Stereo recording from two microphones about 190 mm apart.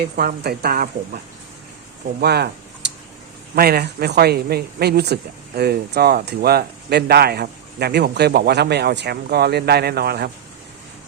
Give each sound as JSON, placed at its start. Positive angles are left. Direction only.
{"t": 0.2, "sound": "speech", "side_deg": -55}
{"t": 2.2, "sound": "a sound", "side_deg": -60}
{"t": 3.5, "sound": "speech", "side_deg": -55}